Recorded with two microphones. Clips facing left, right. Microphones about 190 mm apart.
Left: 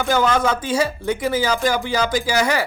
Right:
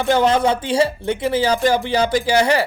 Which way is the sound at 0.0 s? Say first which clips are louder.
Right 3 dB; 30° right (ahead or behind).